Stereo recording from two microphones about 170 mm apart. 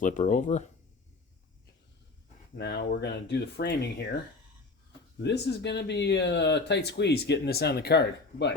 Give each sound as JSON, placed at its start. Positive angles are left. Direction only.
{"t": 0.0, "sound": "speech", "side_deg": 50}
{"t": 2.6, "sound": "speech", "side_deg": 75}
{"t": 5.2, "sound": "speech", "side_deg": 85}